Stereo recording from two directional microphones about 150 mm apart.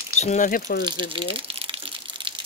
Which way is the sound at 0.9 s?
35° right (ahead or behind).